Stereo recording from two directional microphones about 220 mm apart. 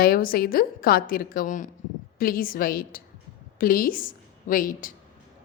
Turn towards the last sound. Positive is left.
turn(degrees=40)  # may be behind; listen again after turning